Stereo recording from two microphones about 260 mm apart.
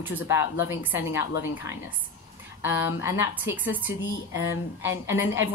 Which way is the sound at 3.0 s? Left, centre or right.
Centre.